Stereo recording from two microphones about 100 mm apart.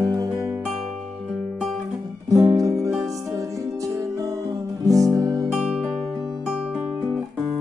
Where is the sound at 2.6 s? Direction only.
35° right (ahead or behind).